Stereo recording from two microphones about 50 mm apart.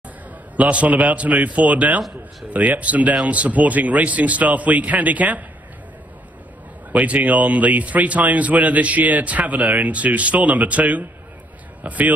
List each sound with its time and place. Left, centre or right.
0.6 s a man's voice: right
6.9 s a man's voice: right